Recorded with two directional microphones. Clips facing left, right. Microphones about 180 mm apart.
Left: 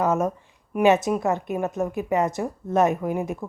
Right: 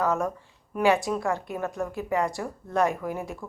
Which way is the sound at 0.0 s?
20° left (ahead or behind).